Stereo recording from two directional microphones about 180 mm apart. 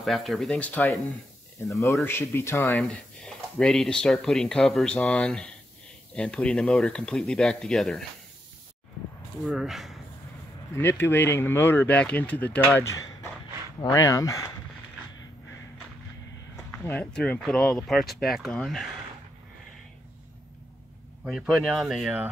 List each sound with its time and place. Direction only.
0.0 s speech: centre (ahead or behind)
2.7 s speech: 5° left (ahead or behind)
9.4 s speech: centre (ahead or behind)
10.7 s speech: 15° left (ahead or behind)
16.7 s speech: 5° left (ahead or behind)
21.2 s speech: centre (ahead or behind)